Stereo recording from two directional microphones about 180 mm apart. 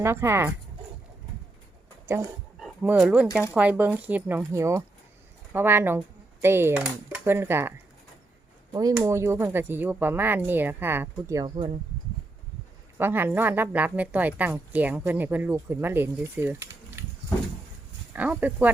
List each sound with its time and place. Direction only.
0.0 s a woman's voice: 15° right (ahead or behind)
2.1 s a woman's voice: 15° right (ahead or behind)
8.7 s a woman's voice: 20° right (ahead or behind)
11.5 s speech: 30° right (ahead or behind)
13.0 s a woman's voice: 10° right (ahead or behind)
18.1 s a woman's voice: 10° right (ahead or behind)